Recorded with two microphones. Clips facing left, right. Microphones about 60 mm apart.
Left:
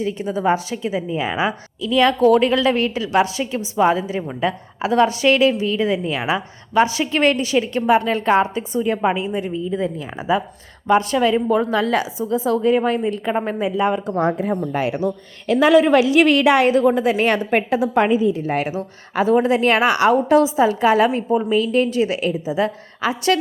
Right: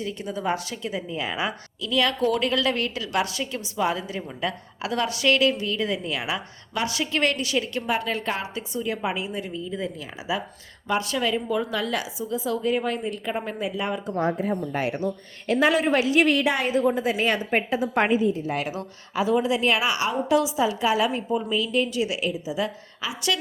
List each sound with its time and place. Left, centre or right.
0.0 s a woman's voice: left
7.8 s a woman's voice: left
11.3 s a woman's voice: left
14.1 s a woman's voice: left
16.0 s a woman's voice: left
18.4 s a woman's voice: left
20.2 s a woman's voice: left